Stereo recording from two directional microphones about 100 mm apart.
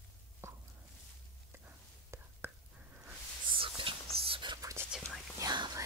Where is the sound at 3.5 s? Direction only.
60° right (ahead or behind).